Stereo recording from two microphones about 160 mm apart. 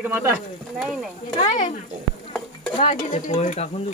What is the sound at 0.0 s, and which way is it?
Speech, 15° right (ahead or behind).